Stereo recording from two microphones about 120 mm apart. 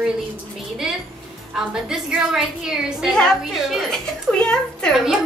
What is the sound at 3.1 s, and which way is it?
A child's voice, 5° left (ahead or behind).